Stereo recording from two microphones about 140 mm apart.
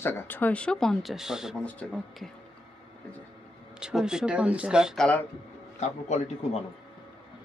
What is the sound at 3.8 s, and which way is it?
Speech, 5° right (ahead or behind).